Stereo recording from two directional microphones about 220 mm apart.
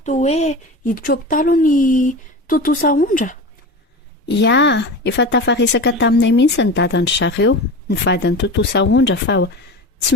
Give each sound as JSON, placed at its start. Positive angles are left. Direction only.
{"t": 0.0, "sound": "speech", "side_deg": 30}
{"t": 4.4, "sound": "a woman's voice", "side_deg": 55}